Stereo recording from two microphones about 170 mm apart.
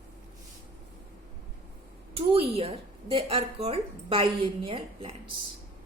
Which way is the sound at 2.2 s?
35° right (ahead or behind).